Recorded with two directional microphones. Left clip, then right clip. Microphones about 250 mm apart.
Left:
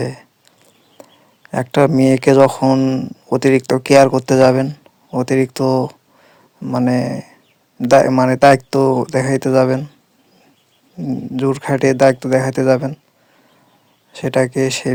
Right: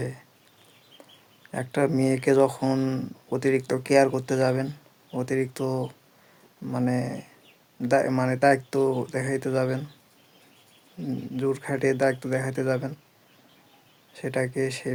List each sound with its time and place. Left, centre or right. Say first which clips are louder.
0.0 s speech: left 11 dB; left
1.0 s a sound: left 11 dB; left
1.5 s speech: left 12 dB; left
10.9 s speech: left 10 dB; left
14.1 s speech: left 12 dB; left